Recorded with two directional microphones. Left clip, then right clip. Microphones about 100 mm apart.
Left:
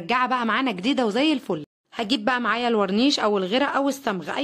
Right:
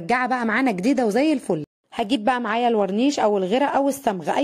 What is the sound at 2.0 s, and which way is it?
Speech, 50° right (ahead or behind).